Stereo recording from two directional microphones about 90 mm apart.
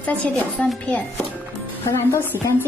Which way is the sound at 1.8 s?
30° left (ahead or behind).